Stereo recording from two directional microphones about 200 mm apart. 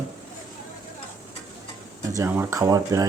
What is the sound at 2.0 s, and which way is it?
Speech, 15° right (ahead or behind).